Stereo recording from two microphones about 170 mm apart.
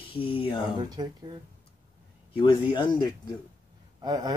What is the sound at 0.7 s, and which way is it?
Speech, 25° right (ahead or behind).